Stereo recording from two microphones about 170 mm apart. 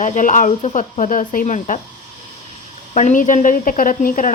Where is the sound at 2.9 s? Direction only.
45° left (ahead or behind).